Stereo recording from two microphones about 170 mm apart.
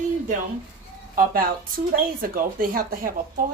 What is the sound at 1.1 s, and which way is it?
Speech, 55° right (ahead or behind).